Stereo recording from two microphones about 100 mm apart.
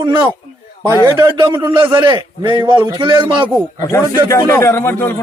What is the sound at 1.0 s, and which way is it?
A man's voice, 35° right (ahead or behind).